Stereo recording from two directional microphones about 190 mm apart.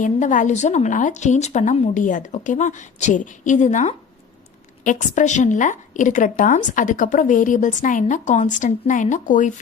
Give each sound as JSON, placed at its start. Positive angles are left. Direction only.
{"t": 0.0, "sound": "a woman's voice", "side_deg": 40}